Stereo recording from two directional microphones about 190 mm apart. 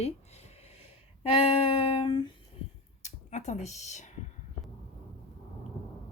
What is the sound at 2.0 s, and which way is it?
Speech, 25° left (ahead or behind).